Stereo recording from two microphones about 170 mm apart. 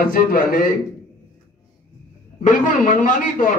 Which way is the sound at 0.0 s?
55° left (ahead or behind).